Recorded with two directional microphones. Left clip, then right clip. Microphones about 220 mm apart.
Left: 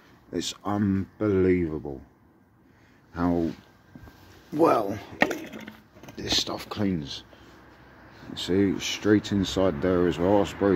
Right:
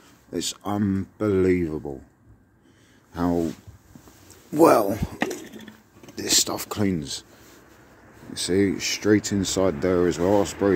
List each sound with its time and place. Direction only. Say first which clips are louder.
0.3 s speech: right 1 dB; 10° right (ahead or behind)
3.1 s speech: right 2 dB; 15° right (ahead or behind)
4.6 s speech: right 5 dB; 35° right (ahead or behind)
6.1 s speech: right 4 dB; 35° right (ahead or behind)
8.4 s speech: right 2 dB; 15° right (ahead or behind)